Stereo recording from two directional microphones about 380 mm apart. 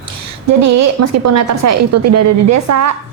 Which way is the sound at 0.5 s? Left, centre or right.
Right.